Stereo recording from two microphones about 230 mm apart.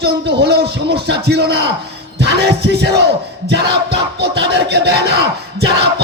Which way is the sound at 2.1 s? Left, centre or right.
Right.